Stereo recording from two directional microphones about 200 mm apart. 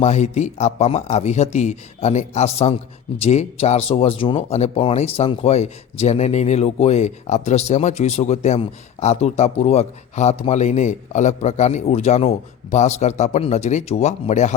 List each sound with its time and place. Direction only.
0.0 s speech: 35° left (ahead or behind)